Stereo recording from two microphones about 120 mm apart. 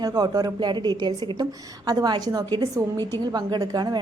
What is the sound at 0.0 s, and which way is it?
A woman's voice, 35° right (ahead or behind).